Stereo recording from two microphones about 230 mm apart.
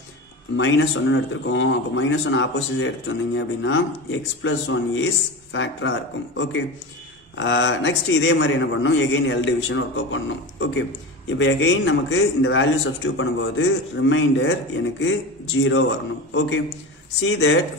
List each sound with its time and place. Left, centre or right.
0.6 s a man's voice: left